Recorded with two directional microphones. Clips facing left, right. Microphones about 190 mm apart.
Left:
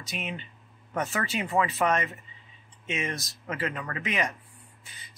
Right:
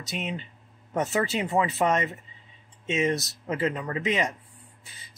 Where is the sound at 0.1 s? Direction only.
30° right (ahead or behind).